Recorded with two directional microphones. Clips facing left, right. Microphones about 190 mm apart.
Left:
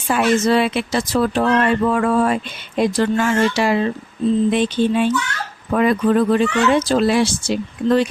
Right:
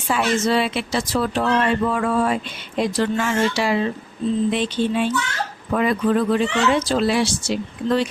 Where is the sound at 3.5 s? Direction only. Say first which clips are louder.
Left 3 dB; 50° left (ahead or behind).